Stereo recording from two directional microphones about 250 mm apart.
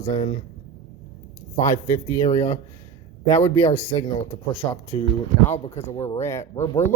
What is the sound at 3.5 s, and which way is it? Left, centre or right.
Speech, left.